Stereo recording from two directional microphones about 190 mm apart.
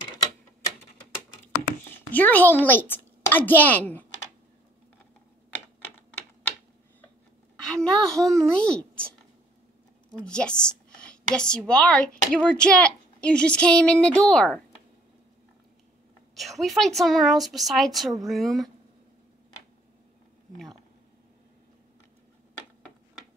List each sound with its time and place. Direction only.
1.9 s a child's voice: 10° left (ahead or behind)
7.6 s a child's voice: 5° left (ahead or behind)
10.1 s a woman's voice: 5° left (ahead or behind)
16.3 s a woman's voice: centre (ahead or behind)